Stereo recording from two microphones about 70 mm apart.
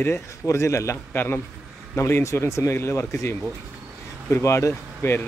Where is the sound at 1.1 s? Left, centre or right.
Left.